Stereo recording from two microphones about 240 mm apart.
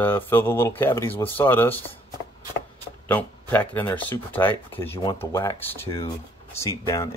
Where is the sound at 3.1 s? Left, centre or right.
Centre.